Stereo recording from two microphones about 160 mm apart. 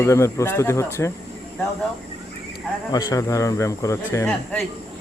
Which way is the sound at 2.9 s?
20° left (ahead or behind).